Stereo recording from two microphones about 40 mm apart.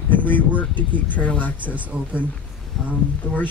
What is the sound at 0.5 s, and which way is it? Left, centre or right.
Speech, right.